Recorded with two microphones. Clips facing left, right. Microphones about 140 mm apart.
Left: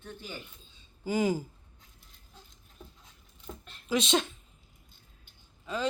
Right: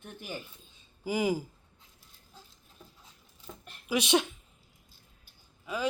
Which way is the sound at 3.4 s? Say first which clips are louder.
Left 3 dB; 10° right (ahead or behind).